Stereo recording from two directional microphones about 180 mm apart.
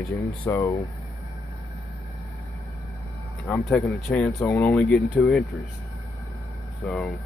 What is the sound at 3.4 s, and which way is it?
Speech, 10° left (ahead or behind).